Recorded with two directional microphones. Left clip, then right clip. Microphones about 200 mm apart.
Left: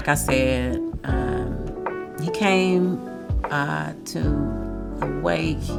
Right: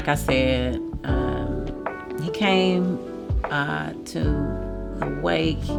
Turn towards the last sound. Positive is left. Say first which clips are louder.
# right 1 dB
turn(degrees=-40)  # may be behind; listen again after turning